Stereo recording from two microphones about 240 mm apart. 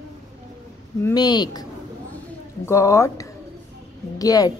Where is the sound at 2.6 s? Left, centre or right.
Centre.